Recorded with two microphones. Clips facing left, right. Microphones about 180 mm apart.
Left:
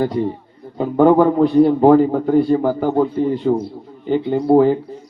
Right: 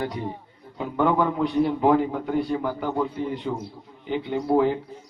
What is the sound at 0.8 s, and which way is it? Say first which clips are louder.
Speech: left 10 dB; 35° left (ahead or behind).